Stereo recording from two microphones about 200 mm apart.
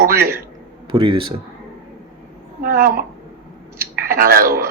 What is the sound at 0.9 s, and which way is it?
Speech, 20° right (ahead or behind).